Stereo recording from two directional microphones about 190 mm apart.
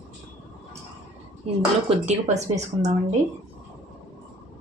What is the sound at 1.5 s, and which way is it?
Speech, 30° right (ahead or behind).